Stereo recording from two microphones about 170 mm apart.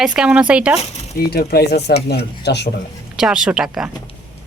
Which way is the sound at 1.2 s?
65° left (ahead or behind).